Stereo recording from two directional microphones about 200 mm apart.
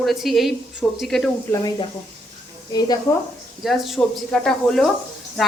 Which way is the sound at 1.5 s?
20° left (ahead or behind).